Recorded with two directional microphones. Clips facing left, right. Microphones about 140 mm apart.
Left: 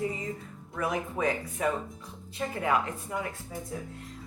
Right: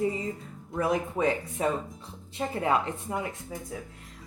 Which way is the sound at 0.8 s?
30° right (ahead or behind).